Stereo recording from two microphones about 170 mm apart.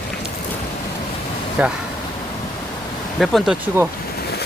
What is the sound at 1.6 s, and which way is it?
Speech, 10° right (ahead or behind).